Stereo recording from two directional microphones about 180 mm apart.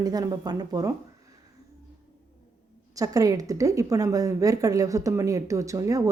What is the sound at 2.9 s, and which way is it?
Speech, 20° right (ahead or behind).